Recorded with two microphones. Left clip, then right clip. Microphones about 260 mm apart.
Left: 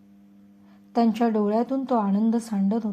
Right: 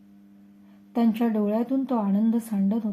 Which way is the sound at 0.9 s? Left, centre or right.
Centre.